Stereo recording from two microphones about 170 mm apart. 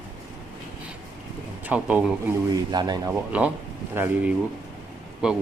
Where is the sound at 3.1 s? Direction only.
10° right (ahead or behind).